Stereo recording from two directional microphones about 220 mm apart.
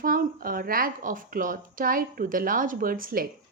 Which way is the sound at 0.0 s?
40° right (ahead or behind).